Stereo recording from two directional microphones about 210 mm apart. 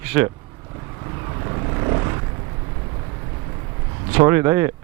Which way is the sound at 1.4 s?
25° right (ahead or behind).